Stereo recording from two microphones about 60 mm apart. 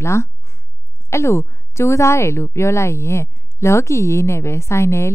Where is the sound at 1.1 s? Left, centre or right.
Left.